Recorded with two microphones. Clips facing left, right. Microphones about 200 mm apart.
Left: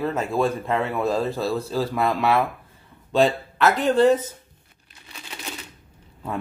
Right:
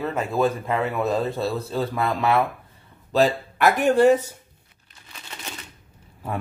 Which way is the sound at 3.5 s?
15° right (ahead or behind).